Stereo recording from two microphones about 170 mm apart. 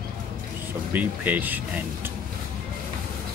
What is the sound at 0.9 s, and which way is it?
Speech, 10° right (ahead or behind).